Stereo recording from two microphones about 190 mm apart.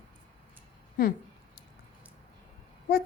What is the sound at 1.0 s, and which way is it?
Speech, 50° left (ahead or behind).